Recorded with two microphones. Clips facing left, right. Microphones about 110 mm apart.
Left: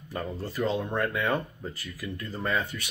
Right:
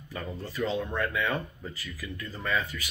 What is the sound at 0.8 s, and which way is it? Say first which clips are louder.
Speech: left 2 dB; 35° left (ahead or behind).